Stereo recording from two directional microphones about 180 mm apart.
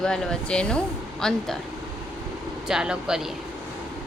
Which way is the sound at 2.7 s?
5° right (ahead or behind).